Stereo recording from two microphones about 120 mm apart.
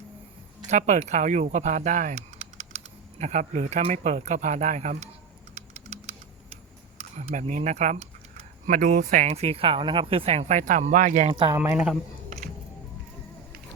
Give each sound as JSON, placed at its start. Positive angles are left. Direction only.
{"t": 0.7, "sound": "speech", "side_deg": -80}
{"t": 5.5, "sound": "typing", "side_deg": -65}
{"t": 7.2, "sound": "speech", "side_deg": -75}
{"t": 8.6, "sound": "speech", "side_deg": -90}
{"t": 11.3, "sound": "speech", "side_deg": -40}
{"t": 11.5, "sound": "speech", "side_deg": -20}